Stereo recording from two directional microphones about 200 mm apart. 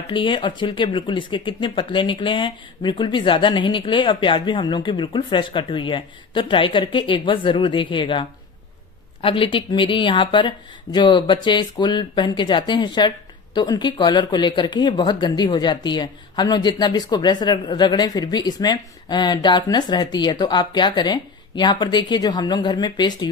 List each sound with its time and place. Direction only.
0.1 s speech: 25° left (ahead or behind)